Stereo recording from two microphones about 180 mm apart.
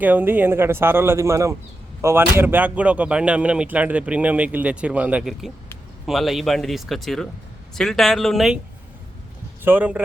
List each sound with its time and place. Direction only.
0.0 s speech: 10° right (ahead or behind)
9.6 s speech: 10° right (ahead or behind)